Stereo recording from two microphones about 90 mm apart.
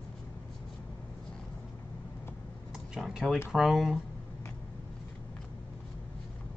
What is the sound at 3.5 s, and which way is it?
Speech, 5° right (ahead or behind).